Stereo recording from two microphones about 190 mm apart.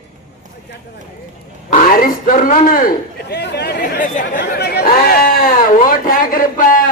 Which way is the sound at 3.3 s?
60° left (ahead or behind).